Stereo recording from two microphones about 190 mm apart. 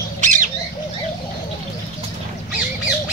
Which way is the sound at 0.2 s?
40° right (ahead or behind).